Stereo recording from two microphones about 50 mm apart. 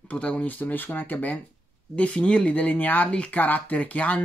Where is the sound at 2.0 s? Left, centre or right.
Left.